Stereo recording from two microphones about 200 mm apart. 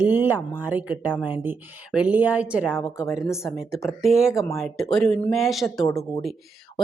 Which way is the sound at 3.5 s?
Centre (ahead or behind).